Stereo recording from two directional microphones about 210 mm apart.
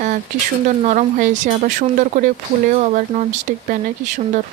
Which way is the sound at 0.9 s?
35° right (ahead or behind).